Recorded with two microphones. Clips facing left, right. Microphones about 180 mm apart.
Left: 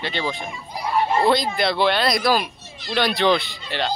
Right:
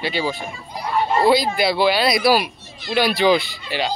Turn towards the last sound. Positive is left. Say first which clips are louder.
# right 2 dB
turn(degrees=-5)  # may be behind; listen again after turning